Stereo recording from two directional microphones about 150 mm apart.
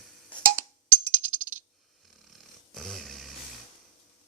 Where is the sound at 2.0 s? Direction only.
Centre (ahead or behind).